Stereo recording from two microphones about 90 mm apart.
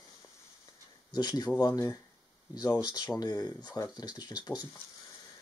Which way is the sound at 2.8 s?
50° left (ahead or behind).